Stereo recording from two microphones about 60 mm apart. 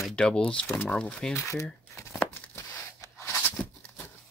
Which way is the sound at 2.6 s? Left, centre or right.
Left.